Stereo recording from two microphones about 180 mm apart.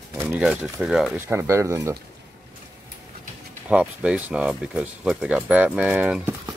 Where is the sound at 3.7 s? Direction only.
5° right (ahead or behind).